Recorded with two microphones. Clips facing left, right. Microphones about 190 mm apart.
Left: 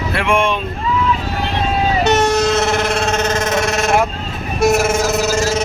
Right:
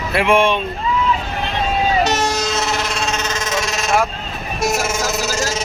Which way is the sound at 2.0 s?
60° left (ahead or behind).